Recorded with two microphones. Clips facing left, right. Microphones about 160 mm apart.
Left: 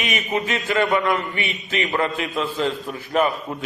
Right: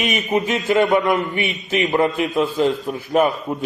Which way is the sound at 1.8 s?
20° right (ahead or behind).